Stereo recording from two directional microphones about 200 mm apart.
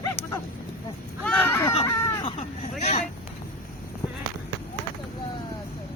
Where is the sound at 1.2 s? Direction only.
10° left (ahead or behind).